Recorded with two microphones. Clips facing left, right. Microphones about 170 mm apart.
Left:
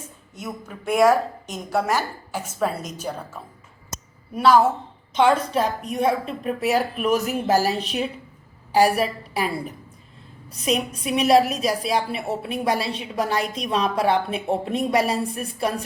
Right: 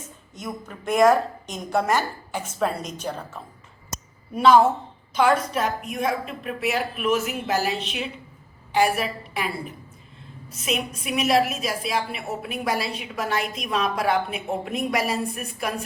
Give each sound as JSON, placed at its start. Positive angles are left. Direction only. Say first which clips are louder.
{"t": 0.0, "sound": "a woman's voice", "louder": "left 1 dB", "side_deg": 10}
{"t": 5.1, "sound": "a woman's voice", "louder": "left 2 dB", "side_deg": 30}